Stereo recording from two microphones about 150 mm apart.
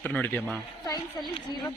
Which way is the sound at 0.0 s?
10° left (ahead or behind).